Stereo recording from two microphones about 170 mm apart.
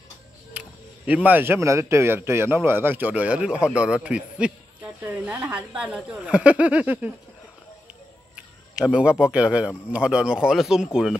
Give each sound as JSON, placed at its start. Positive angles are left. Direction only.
{"t": 0.5, "sound": "speech", "side_deg": -10}
{"t": 8.4, "sound": "a sound", "side_deg": -5}
{"t": 9.2, "sound": "speech", "side_deg": -5}